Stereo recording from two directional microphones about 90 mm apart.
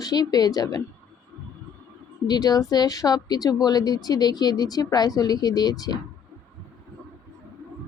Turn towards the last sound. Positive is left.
turn(degrees=50)  # may be behind; listen again after turning